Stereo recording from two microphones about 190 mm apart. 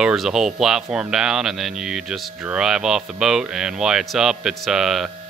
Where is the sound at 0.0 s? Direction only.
5° right (ahead or behind).